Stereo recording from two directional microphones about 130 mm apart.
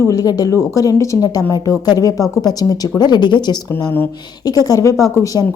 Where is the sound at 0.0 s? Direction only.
25° left (ahead or behind).